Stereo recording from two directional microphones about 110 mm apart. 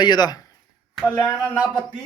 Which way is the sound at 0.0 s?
40° left (ahead or behind).